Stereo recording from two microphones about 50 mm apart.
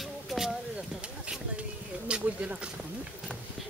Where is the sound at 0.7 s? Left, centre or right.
Right.